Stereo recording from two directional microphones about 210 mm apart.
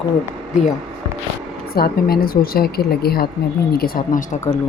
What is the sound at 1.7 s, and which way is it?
Speech, 45° left (ahead or behind).